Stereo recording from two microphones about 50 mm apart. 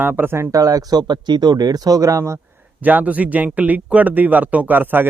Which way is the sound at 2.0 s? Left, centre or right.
Right.